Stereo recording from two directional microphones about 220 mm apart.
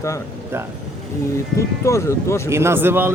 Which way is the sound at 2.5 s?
10° right (ahead or behind).